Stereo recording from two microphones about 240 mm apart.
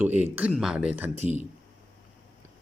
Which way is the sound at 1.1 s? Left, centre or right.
Right.